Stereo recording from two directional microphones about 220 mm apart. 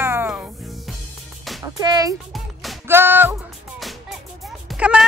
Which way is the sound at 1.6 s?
15° right (ahead or behind).